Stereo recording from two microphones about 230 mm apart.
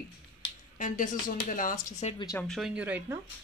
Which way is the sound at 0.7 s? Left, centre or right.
Left.